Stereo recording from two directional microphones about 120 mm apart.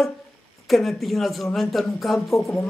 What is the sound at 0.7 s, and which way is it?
Speech, centre (ahead or behind).